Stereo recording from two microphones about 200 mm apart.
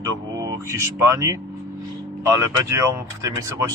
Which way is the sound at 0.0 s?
15° right (ahead or behind).